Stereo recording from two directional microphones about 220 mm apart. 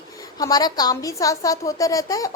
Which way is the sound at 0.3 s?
15° left (ahead or behind).